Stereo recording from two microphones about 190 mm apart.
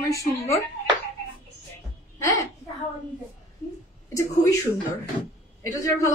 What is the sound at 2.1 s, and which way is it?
Music, 15° left (ahead or behind).